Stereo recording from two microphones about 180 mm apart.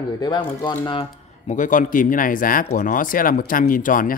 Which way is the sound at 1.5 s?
45° left (ahead or behind).